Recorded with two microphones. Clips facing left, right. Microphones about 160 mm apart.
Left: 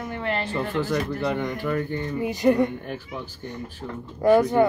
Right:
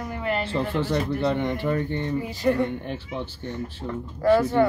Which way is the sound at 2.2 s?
20° left (ahead or behind).